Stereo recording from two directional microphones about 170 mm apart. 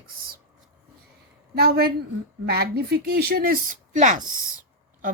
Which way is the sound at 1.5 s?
65° right (ahead or behind).